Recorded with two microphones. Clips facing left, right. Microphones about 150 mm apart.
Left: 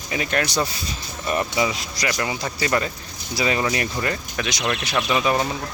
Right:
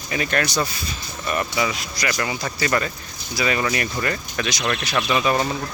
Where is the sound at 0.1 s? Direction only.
15° left (ahead or behind).